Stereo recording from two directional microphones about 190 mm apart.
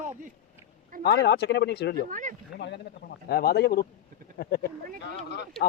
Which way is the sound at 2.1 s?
40° right (ahead or behind).